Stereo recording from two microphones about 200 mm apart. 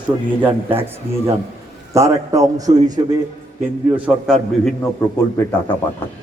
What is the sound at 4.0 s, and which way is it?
Speech, 5° right (ahead or behind).